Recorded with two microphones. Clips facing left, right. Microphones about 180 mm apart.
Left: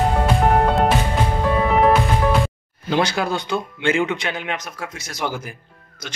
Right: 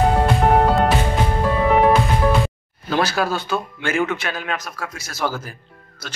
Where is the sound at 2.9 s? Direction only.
20° left (ahead or behind).